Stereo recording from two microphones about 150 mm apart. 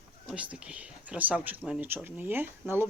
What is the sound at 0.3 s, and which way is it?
Speech, 5° right (ahead or behind).